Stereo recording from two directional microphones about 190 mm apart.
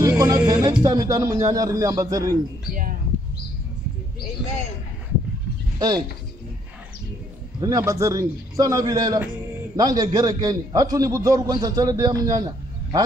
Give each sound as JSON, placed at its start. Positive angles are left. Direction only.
{"t": 0.0, "sound": "music", "side_deg": -15}
{"t": 0.8, "sound": "a man's voice", "side_deg": -15}
{"t": 5.8, "sound": "speech", "side_deg": -20}
{"t": 7.6, "sound": "a man's voice", "side_deg": -15}